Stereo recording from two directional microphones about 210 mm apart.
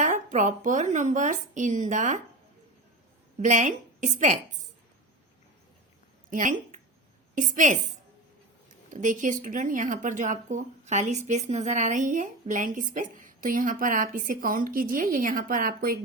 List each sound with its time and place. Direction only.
0.0 s speech: 35° right (ahead or behind)
3.4 s a woman's voice: 35° right (ahead or behind)
6.3 s speech: 40° right (ahead or behind)
8.9 s speech: 35° right (ahead or behind)